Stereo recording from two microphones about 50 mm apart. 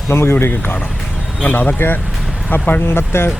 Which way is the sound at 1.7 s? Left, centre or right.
Left.